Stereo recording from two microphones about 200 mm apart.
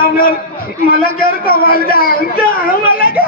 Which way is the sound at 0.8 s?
45° left (ahead or behind).